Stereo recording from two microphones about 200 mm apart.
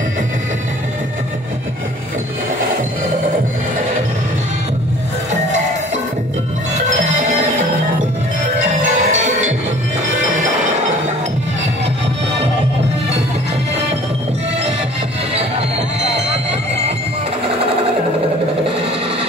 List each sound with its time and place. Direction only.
7.2 s music: 35° right (ahead or behind)
8.8 s music: 35° right (ahead or behind)
16.0 s music: 30° right (ahead or behind)